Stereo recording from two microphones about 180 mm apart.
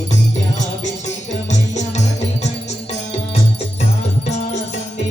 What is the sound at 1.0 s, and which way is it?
Music, 40° left (ahead or behind).